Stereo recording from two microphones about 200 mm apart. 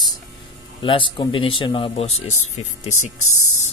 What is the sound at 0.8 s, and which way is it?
Speech, 25° left (ahead or behind).